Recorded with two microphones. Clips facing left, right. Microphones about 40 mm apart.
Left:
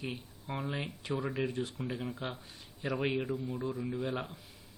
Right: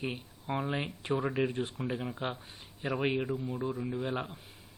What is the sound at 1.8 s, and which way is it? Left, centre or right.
Speech, centre.